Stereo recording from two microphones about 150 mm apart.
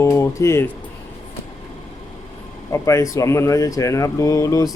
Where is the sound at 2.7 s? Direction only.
20° left (ahead or behind).